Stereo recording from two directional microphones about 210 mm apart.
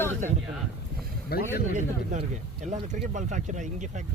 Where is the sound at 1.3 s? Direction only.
45° left (ahead or behind).